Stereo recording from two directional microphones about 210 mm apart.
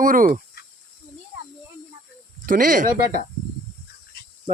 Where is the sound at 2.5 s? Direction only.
40° right (ahead or behind).